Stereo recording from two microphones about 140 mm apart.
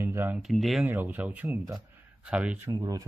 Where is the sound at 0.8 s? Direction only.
15° right (ahead or behind).